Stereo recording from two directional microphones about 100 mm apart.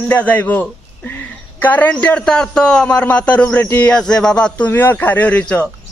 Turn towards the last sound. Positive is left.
turn(degrees=15)  # may be behind; listen again after turning